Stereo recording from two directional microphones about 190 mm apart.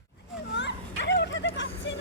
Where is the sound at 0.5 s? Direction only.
65° left (ahead or behind).